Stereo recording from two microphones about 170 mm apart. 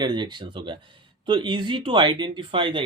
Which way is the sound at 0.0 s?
25° right (ahead or behind).